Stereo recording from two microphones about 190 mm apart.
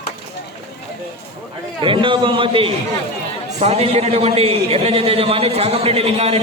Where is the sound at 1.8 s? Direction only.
25° right (ahead or behind).